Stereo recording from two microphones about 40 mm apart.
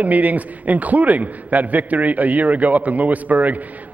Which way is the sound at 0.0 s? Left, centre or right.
Right.